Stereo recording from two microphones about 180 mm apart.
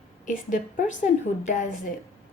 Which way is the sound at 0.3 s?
45° left (ahead or behind).